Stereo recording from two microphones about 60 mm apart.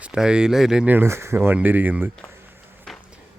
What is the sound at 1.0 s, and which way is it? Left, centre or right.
Speech, right.